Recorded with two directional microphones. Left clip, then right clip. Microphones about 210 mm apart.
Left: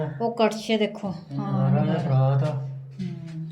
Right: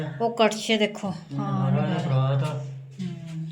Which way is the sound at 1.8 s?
45° left (ahead or behind).